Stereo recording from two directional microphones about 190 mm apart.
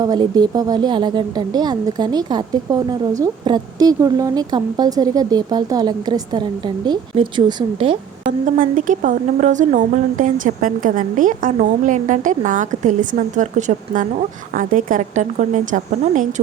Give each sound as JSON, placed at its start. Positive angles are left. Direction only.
{"t": 0.0, "sound": "a woman's voice", "side_deg": -20}
{"t": 8.3, "sound": "a woman's voice", "side_deg": -45}